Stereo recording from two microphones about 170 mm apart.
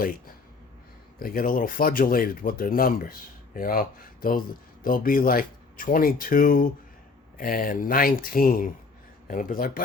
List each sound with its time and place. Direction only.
1.2 s speech: 55° left (ahead or behind)